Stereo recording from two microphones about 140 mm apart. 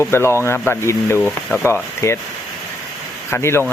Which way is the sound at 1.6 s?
20° left (ahead or behind).